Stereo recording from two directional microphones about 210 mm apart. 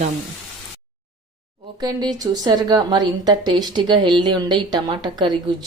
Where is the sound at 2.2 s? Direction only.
20° right (ahead or behind).